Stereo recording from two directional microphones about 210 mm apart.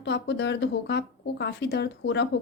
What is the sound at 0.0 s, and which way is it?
Speech, 55° left (ahead or behind).